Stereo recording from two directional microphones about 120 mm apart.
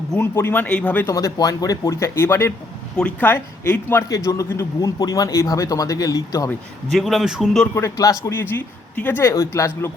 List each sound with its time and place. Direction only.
0.2 s speech: 20° left (ahead or behind)
1.1 s speech: 30° left (ahead or behind)
6.9 s a man's voice: centre (ahead or behind)
7.8 s speech: 25° left (ahead or behind)